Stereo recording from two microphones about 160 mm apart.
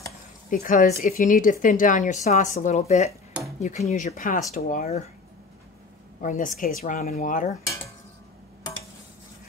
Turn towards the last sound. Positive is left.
turn(degrees=55)  # may be behind; listen again after turning